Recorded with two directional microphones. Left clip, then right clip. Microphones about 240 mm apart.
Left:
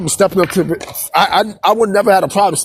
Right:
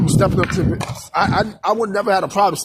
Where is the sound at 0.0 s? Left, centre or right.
Left.